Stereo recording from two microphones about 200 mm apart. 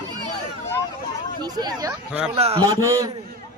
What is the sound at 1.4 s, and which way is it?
Speech, 20° right (ahead or behind).